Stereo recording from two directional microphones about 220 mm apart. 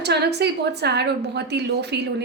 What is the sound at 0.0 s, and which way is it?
A woman's voice, 50° right (ahead or behind).